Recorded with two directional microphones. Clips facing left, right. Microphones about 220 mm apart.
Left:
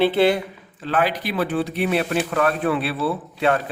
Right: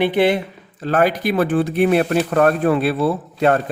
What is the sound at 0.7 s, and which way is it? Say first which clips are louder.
Speech: right 5 dB; 45° right (ahead or behind).